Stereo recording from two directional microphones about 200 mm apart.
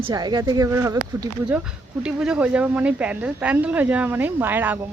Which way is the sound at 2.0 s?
5° right (ahead or behind).